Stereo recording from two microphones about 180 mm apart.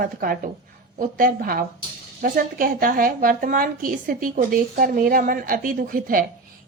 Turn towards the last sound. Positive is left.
turn(degrees=-50)  # may be behind; listen again after turning